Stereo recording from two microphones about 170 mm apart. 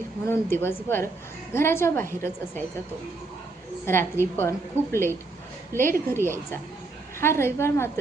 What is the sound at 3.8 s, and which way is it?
Speech, 15° left (ahead or behind).